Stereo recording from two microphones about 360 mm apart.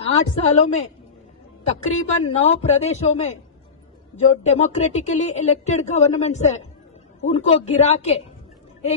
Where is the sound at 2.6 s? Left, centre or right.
Centre.